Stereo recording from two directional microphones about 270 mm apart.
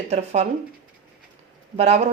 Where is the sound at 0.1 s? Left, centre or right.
Right.